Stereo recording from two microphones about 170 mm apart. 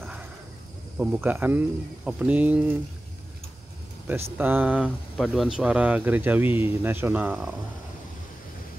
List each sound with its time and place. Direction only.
0.9 s speech: 10° right (ahead or behind)
4.1 s speech: 10° right (ahead or behind)